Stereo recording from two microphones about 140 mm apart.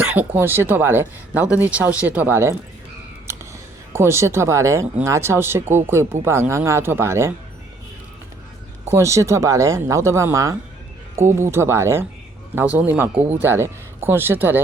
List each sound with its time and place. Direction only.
0.0 s speech: 10° right (ahead or behind)
3.9 s speech: 20° right (ahead or behind)
8.8 s speech: 20° right (ahead or behind)